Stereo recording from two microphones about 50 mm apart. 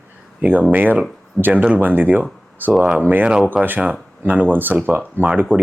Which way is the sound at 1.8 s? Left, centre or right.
Right.